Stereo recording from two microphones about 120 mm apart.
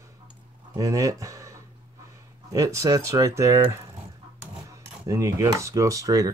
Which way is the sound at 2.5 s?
25° right (ahead or behind).